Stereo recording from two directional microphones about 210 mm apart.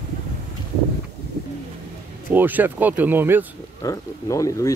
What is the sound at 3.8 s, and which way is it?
Speech, 15° left (ahead or behind).